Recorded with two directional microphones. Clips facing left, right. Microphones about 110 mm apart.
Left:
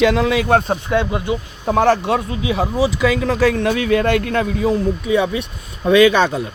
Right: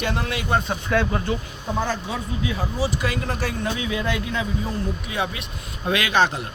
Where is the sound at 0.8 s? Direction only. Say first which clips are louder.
Left 4 dB; 20° left (ahead or behind).